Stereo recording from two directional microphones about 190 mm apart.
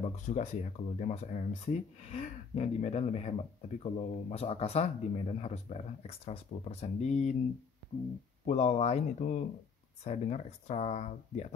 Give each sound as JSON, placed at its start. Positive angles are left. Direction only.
{"t": 0.0, "sound": "speech", "side_deg": 40}
{"t": 8.5, "sound": "speech", "side_deg": 35}